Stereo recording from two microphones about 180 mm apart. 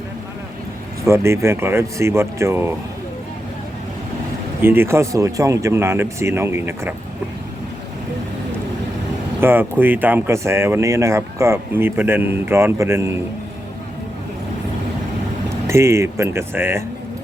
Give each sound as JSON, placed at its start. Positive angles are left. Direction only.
{"t": 1.0, "sound": "speech", "side_deg": -15}
{"t": 4.6, "sound": "speech", "side_deg": -10}
{"t": 9.4, "sound": "speech", "side_deg": -10}
{"t": 15.6, "sound": "speech", "side_deg": -15}